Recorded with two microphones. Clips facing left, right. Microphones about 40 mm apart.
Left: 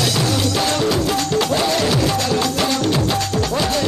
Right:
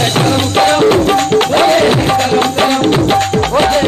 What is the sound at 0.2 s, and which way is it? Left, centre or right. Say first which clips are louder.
Music: right 8 dB; right.